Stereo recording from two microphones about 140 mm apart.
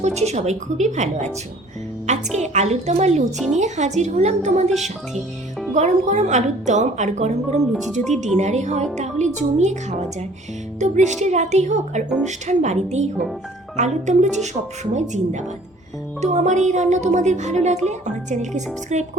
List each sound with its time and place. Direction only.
0.0 s a woman's voice: 50° right (ahead or behind)
3.3 s speech: centre (ahead or behind)
3.6 s speech: 55° right (ahead or behind)
4.7 s speech: centre (ahead or behind)
5.7 s speech: 55° right (ahead or behind)
7.7 s speech: centre (ahead or behind)
8.4 s speech: 55° right (ahead or behind)
10.8 s speech: 60° right (ahead or behind)